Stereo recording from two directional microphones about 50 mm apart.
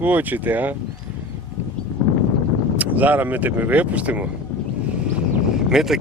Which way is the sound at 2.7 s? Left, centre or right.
Right.